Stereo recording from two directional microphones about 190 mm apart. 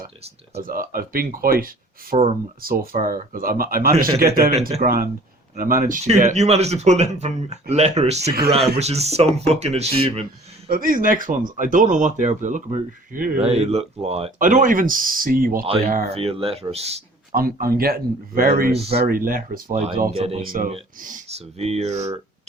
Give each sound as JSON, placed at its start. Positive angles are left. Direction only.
{"t": 0.5, "sound": "speech", "side_deg": -50}
{"t": 10.7, "sound": "speech", "side_deg": -50}
{"t": 13.4, "sound": "speech", "side_deg": -35}
{"t": 15.6, "sound": "speech", "side_deg": -30}
{"t": 17.3, "sound": "speech", "side_deg": -50}
{"t": 18.7, "sound": "speech", "side_deg": -30}
{"t": 18.9, "sound": "speech", "side_deg": -50}
{"t": 19.7, "sound": "speech", "side_deg": -35}
{"t": 20.4, "sound": "speech", "side_deg": -50}